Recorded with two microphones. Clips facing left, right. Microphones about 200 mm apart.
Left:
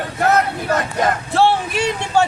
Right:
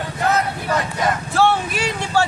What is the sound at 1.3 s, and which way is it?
Speech, 30° left (ahead or behind).